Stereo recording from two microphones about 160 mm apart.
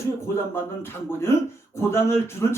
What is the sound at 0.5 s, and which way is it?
Speech, 15° left (ahead or behind).